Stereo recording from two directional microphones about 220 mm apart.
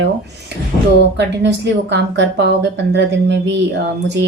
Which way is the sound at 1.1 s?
50° right (ahead or behind).